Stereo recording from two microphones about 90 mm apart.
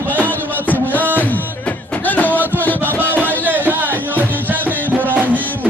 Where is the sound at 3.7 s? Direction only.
20° right (ahead or behind).